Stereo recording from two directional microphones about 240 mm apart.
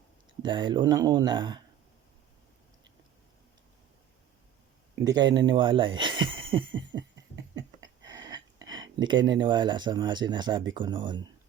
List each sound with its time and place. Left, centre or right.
0.4 s speech: centre
5.0 s speech: centre
6.9 s cough: centre
7.5 s a sound: centre
8.6 s speech: centre